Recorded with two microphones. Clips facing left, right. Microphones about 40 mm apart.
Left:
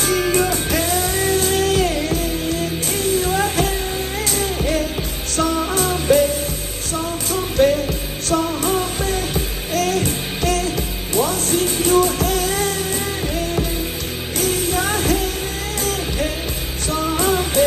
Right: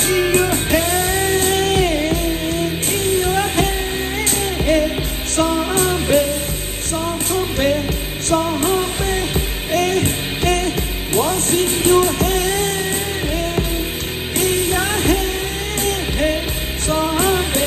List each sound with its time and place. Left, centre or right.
0.0 s music: right
7.6 s music: right
14.3 s music: right